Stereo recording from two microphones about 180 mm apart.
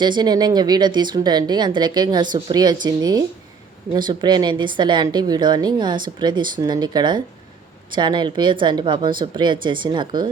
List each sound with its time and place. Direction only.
0.0 s a woman's voice: 25° right (ahead or behind)